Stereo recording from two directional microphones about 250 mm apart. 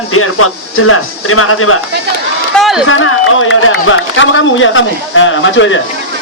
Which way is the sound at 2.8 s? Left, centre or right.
Left.